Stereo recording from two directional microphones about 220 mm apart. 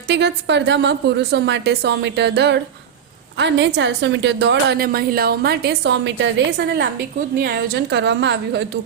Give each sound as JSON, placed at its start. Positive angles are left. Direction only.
{"t": 0.1, "sound": "a woman's voice", "side_deg": -50}
{"t": 7.4, "sound": "a woman's voice", "side_deg": -50}